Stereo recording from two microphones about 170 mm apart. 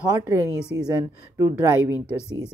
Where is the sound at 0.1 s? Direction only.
20° right (ahead or behind).